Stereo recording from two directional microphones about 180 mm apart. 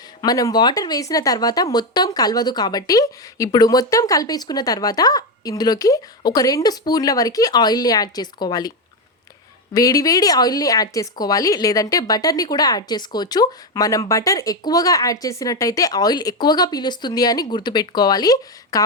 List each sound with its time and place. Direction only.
0.2 s speech: 20° left (ahead or behind)
9.7 s speech: 20° left (ahead or behind)